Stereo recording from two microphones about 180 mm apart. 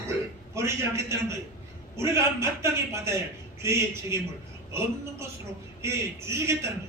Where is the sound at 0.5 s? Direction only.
15° right (ahead or behind).